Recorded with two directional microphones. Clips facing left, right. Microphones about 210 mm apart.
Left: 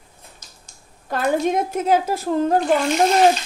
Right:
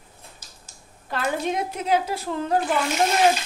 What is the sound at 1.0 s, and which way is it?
A woman's voice, 45° left (ahead or behind).